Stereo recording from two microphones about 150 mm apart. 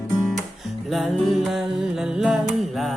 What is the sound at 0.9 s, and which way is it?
Music, centre (ahead or behind).